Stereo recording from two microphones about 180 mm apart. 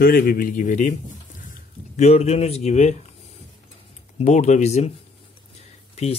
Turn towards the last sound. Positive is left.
turn(degrees=35)  # may be behind; listen again after turning